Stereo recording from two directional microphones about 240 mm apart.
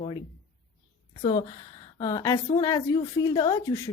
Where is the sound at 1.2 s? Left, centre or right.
Left.